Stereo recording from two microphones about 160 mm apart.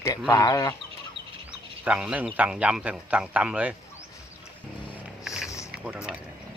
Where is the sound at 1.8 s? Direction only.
5° right (ahead or behind).